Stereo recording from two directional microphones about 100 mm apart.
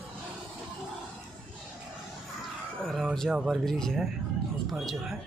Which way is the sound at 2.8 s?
Centre (ahead or behind).